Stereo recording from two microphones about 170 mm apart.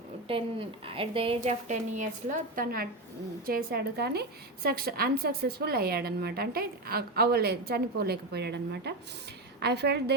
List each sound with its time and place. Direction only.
0.9 s a woman's voice: 30° right (ahead or behind); by 10.2 s 75° right (ahead or behind)